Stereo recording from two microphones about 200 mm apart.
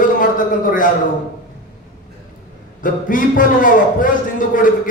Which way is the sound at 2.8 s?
40° left (ahead or behind).